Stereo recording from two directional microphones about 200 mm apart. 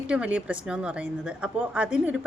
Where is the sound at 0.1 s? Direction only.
5° right (ahead or behind).